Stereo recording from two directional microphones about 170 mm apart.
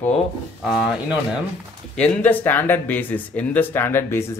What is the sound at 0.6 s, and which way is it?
Speech, 5° right (ahead or behind).